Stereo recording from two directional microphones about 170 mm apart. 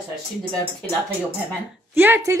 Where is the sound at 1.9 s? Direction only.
10° right (ahead or behind).